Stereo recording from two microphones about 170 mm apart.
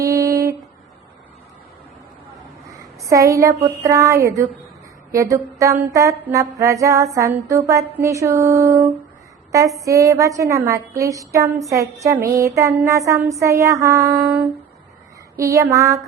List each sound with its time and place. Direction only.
0.0 s a sound: 20° right (ahead or behind)
3.1 s a woman's voice: 20° right (ahead or behind)
15.4 s a woman's voice: 20° right (ahead or behind)